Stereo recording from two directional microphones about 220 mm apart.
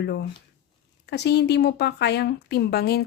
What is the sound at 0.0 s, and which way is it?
A woman's voice, 50° left (ahead or behind).